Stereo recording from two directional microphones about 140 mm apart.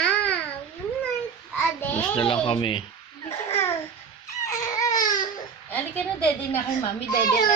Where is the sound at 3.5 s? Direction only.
15° left (ahead or behind).